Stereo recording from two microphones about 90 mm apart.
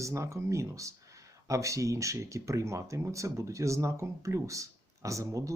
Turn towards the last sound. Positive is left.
turn(degrees=-35)  # may be behind; listen again after turning